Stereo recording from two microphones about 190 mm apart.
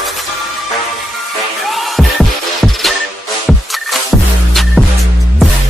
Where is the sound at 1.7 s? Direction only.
Centre (ahead or behind).